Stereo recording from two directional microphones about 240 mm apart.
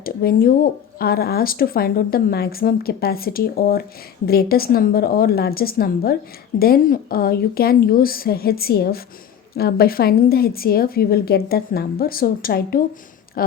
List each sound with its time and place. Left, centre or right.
0.0 s speech: left